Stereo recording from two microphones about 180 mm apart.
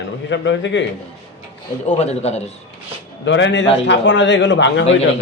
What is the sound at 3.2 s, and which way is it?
A man's voice, 90° left.